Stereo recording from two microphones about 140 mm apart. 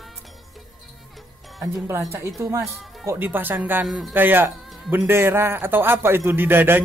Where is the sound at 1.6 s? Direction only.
20° right (ahead or behind).